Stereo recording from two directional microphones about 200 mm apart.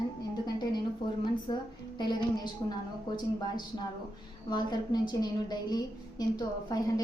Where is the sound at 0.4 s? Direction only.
20° left (ahead or behind).